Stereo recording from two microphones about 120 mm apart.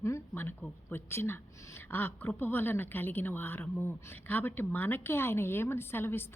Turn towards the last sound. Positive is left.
turn(degrees=20)  # may be behind; listen again after turning